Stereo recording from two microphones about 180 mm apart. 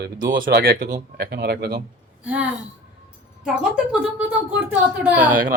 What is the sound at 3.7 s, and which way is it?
A woman's voice, 5° right (ahead or behind).